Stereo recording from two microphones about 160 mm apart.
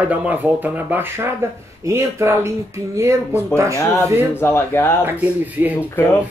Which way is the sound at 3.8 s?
15° left (ahead or behind).